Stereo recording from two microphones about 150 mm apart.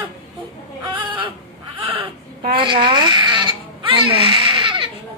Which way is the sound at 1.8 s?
35° right (ahead or behind).